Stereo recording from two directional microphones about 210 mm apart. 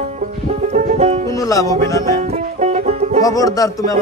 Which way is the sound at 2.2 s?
30° right (ahead or behind).